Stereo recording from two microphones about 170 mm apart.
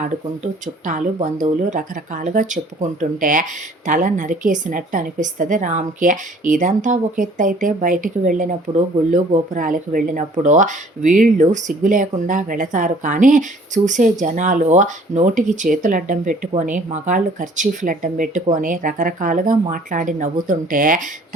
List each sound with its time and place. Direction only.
0.4 s speech: 45° right (ahead or behind)